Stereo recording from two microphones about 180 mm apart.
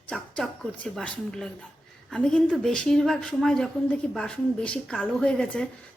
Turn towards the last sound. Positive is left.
turn(degrees=5)  # may be behind; listen again after turning